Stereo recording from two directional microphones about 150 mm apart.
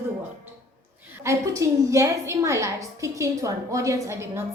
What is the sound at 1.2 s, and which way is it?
A woman's voice, 20° right (ahead or behind).